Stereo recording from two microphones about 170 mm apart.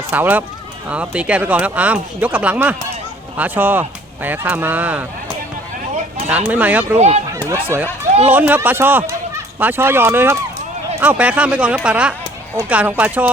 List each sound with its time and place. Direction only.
0.1 s speech: 10° right (ahead or behind)
6.2 s speech: 10° right (ahead or behind)
6.9 s speech: 40° right (ahead or behind)
7.5 s speech: 15° right (ahead or behind)